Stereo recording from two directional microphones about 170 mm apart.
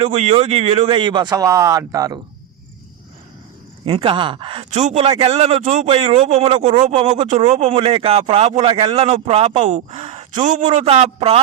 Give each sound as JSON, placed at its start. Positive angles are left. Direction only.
{"t": 0.0, "sound": "speech", "side_deg": -40}
{"t": 3.8, "sound": "speech", "side_deg": -30}